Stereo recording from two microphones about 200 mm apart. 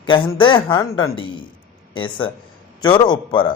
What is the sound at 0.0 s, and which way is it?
Speech, 25° left (ahead or behind).